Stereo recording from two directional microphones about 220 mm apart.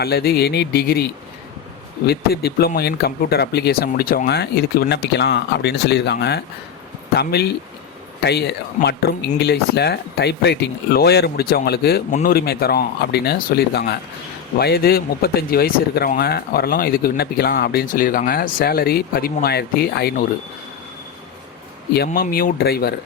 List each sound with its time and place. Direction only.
0.0 s speech: 45° left (ahead or behind)
2.0 s speech: 45° left (ahead or behind)
21.9 s speech: 45° left (ahead or behind)